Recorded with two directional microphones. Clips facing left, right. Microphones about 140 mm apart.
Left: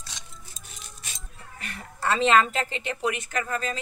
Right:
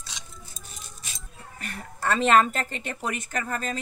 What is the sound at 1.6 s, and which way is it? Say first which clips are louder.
A woman's voice: even; 45° right (ahead or behind).